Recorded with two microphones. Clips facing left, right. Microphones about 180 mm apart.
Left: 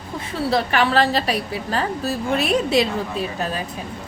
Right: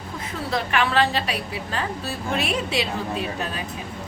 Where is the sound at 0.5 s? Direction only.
35° left (ahead or behind).